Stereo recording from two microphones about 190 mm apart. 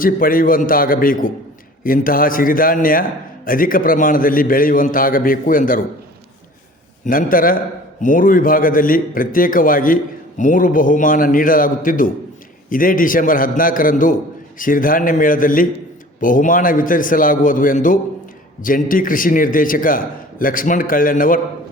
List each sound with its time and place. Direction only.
0.0 s a man's voice: 50° left (ahead or behind)
7.0 s a man's voice: 45° left (ahead or behind)